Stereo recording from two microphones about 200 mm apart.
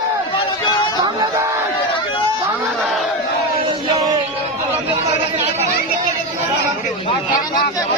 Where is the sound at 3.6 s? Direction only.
25° right (ahead or behind).